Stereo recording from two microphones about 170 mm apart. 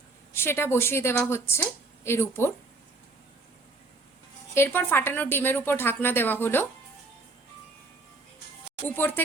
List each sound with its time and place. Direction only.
0.3 s a woman's voice: 15° left (ahead or behind)
4.5 s a woman's voice: 10° left (ahead or behind)
8.9 s a woman's voice: 10° left (ahead or behind)